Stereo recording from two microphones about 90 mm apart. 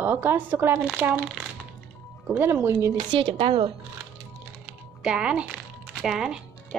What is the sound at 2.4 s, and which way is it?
Speech, 25° right (ahead or behind).